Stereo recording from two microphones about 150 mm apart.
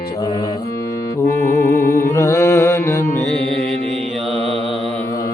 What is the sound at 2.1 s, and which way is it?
Mantra, 20° left (ahead or behind).